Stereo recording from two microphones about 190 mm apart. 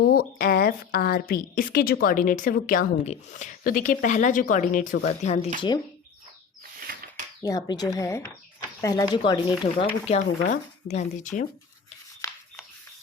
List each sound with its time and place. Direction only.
0.0 s a woman's voice: 50° left (ahead or behind)
7.4 s speech: 20° left (ahead or behind); by 11.4 s 40° left (ahead or behind)
12.2 s a sound: 15° left (ahead or behind)